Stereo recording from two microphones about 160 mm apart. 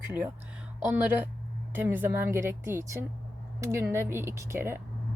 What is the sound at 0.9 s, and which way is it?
Speech, 10° right (ahead or behind).